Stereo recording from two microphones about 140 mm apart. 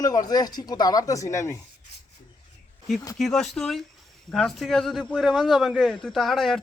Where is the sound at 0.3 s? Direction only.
30° left (ahead or behind).